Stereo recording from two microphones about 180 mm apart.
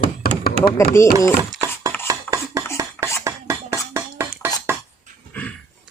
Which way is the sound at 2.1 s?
20° right (ahead or behind).